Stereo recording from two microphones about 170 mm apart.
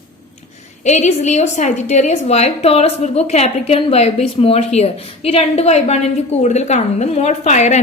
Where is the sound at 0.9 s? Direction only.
40° left (ahead or behind).